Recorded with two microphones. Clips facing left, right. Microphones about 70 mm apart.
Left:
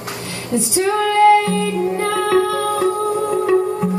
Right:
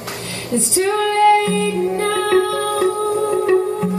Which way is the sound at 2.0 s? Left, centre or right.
Left.